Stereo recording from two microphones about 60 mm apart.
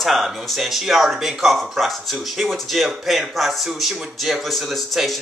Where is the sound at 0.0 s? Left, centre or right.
Centre.